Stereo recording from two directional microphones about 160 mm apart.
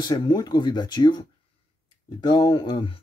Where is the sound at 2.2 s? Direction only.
30° left (ahead or behind).